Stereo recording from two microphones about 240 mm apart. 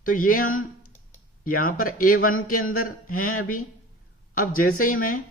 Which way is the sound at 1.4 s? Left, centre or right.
Left.